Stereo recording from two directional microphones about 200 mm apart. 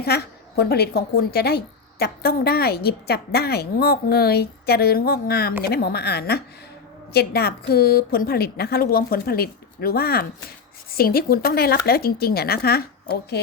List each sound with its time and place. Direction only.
0.0 s a woman's voice: 55° left (ahead or behind)